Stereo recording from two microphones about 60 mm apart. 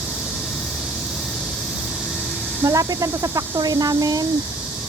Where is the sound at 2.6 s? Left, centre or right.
Right.